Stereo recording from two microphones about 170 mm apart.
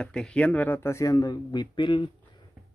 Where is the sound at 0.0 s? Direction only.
5° left (ahead or behind); by 2.0 s 25° left (ahead or behind).